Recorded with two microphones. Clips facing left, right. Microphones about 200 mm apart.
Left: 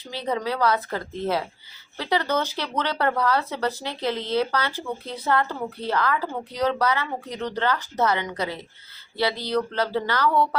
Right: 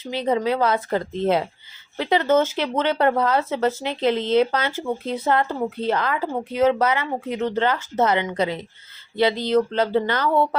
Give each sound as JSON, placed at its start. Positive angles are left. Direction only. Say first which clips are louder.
{"t": 0.0, "sound": "a woman's voice", "louder": "right 5 dB", "side_deg": -20}